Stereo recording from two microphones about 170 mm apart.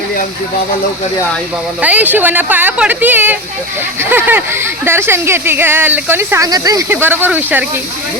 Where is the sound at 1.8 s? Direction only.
10° right (ahead or behind).